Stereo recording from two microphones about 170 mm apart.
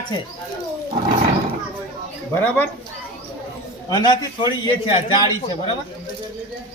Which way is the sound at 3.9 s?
25° left (ahead or behind).